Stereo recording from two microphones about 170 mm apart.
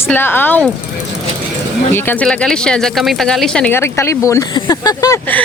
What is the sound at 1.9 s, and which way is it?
Speech, 10° left (ahead or behind).